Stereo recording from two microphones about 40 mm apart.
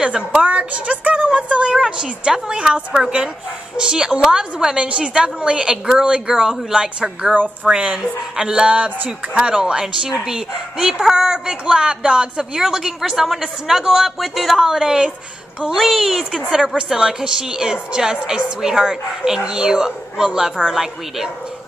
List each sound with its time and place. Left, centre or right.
0.3 s a woman's voice: right; by 4.7 s centre
4.7 s a woman's voice: right
8.0 s a woman's voice: centre
15.7 s a woman's voice: centre
16.6 s speech: centre